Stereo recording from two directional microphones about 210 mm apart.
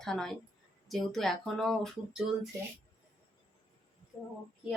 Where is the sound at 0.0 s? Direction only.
Centre (ahead or behind).